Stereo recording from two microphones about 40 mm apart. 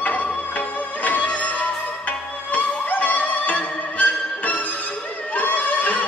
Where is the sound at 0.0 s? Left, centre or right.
Left.